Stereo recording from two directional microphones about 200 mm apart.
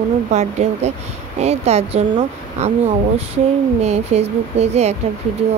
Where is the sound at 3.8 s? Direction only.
30° right (ahead or behind).